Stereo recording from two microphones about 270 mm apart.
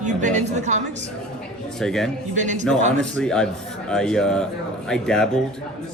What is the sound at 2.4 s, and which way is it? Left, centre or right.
Speech, right.